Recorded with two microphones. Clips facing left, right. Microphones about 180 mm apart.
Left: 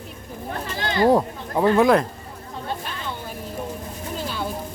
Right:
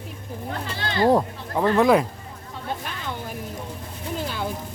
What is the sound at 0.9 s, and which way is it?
Speech, 20° left (ahead or behind).